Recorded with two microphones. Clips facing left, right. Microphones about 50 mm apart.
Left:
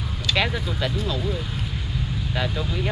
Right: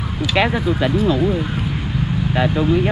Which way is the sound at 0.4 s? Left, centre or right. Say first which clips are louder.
Right 8 dB; right.